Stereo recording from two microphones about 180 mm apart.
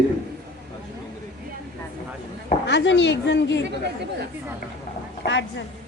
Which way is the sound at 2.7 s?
80° left.